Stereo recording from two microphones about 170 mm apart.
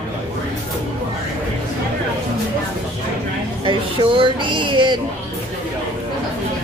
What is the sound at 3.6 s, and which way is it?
Speech, 30° right (ahead or behind).